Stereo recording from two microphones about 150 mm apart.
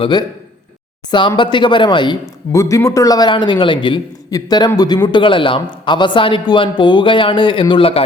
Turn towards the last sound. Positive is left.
turn(degrees=35)  # may be behind; listen again after turning